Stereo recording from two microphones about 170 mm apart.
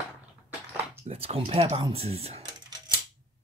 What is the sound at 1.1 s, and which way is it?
Speech, 35° right (ahead or behind).